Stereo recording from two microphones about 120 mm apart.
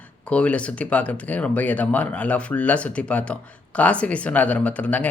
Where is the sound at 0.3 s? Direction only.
10° left (ahead or behind).